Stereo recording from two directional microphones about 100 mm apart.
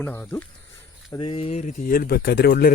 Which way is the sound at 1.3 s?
85° left.